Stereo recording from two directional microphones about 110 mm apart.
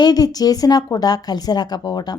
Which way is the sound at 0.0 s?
35° left (ahead or behind).